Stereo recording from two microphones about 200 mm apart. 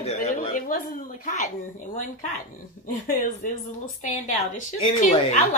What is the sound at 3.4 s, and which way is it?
Speech, 40° left (ahead or behind).